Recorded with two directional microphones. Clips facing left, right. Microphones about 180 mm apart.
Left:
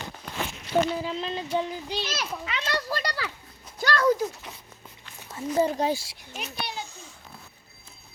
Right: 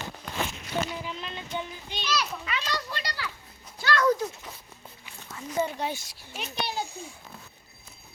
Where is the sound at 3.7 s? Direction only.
40° left (ahead or behind).